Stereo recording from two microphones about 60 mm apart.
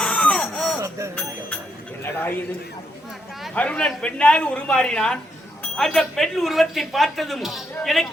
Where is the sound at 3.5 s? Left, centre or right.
Centre.